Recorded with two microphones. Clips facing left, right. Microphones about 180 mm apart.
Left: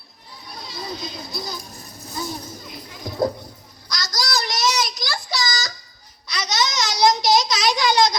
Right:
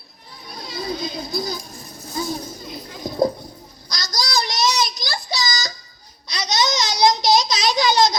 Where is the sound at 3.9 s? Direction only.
20° right (ahead or behind).